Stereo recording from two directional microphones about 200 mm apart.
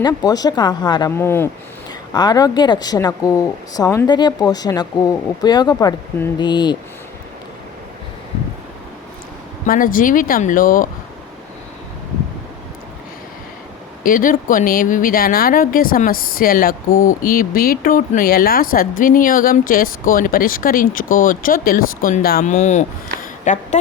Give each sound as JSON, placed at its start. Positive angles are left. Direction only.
{"t": 0.0, "sound": "speech", "side_deg": 20}
{"t": 9.6, "sound": "speech", "side_deg": 45}
{"t": 14.0, "sound": "speech", "side_deg": 45}
{"t": 22.5, "sound": "speech", "side_deg": 35}